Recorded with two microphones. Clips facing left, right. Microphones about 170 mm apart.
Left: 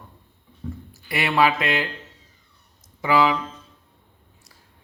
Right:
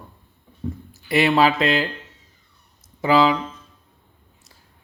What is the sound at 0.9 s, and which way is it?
Speech, 25° right (ahead or behind).